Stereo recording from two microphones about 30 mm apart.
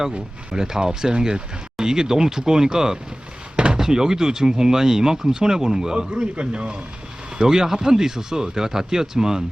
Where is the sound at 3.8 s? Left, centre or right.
Centre.